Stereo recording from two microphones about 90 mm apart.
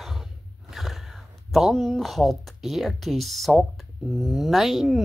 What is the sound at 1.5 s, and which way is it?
A woman's voice, centre (ahead or behind).